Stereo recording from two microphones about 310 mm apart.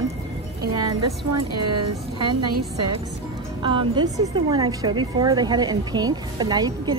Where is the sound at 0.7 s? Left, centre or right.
Right.